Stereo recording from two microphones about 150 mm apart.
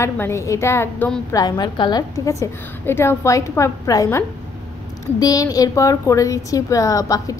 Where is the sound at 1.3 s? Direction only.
25° left (ahead or behind).